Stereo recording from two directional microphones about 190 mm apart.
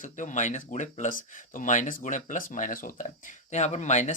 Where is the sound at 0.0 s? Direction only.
40° left (ahead or behind).